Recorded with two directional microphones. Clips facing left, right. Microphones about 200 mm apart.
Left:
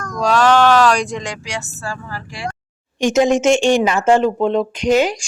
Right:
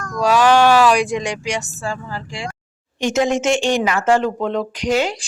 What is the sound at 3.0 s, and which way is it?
Speech, 20° left (ahead or behind).